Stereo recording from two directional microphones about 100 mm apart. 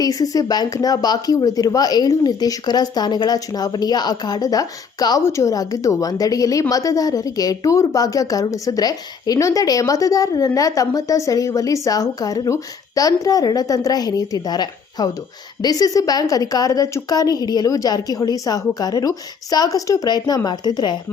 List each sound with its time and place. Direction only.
0.0 s a woman's voice: 40° left (ahead or behind)